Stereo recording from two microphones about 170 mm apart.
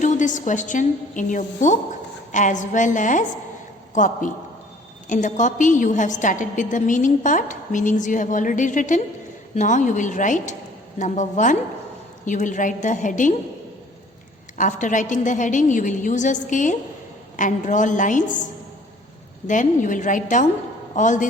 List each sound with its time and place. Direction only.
0.0 s a woman's voice: 45° left (ahead or behind)
14.6 s a woman's voice: 50° left (ahead or behind)
19.5 s a woman's voice: 50° left (ahead or behind)